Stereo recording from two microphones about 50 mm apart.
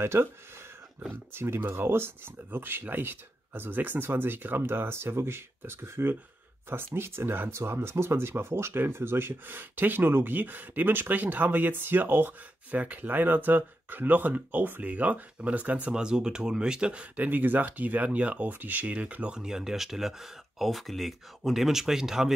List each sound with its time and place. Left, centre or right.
0.0 s speech: right
1.3 s speech: right
15.9 s speech: centre
17.2 s speech: right
19.3 s speech: centre